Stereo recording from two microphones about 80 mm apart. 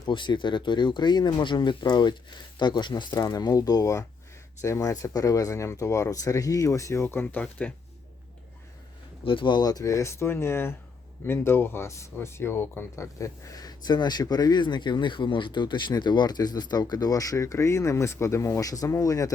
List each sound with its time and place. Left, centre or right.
0.1 s speech: left
7.3 s speech: centre
9.2 s speech: left
9.6 s speech: left